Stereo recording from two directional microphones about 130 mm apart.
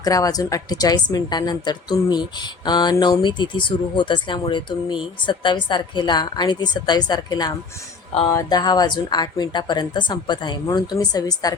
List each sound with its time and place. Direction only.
0.0 s a woman's voice: 25° left (ahead or behind)